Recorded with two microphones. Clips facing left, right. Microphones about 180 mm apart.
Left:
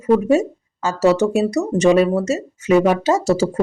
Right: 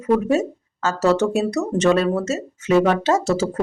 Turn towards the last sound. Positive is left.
turn(degrees=10)  # may be behind; listen again after turning